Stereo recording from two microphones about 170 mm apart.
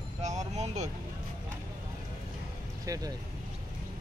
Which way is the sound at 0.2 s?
40° right (ahead or behind).